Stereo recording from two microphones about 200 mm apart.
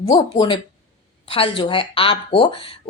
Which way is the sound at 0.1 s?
20° left (ahead or behind).